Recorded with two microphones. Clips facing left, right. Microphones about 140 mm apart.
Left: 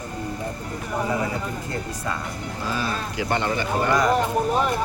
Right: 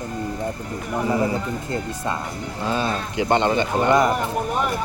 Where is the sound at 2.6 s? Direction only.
25° right (ahead or behind).